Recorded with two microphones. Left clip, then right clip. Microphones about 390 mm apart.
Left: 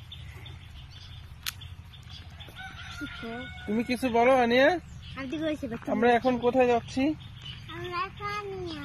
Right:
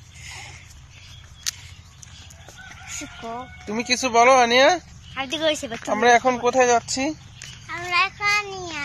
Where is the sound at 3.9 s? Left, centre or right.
Right.